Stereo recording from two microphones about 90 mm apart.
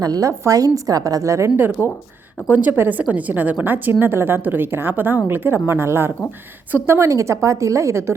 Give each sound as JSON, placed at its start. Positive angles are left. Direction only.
{"t": 0.0, "sound": "a woman's voice", "side_deg": -40}
{"t": 1.5, "sound": "a woman's voice", "side_deg": -25}